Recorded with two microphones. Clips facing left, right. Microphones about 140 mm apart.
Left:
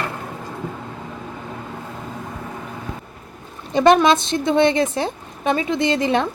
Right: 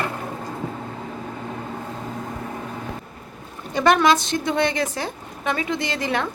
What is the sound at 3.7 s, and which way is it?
A woman's voice, 20° left (ahead or behind).